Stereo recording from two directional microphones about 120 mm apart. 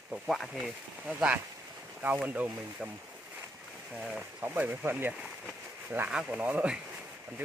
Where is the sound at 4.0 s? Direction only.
5° right (ahead or behind).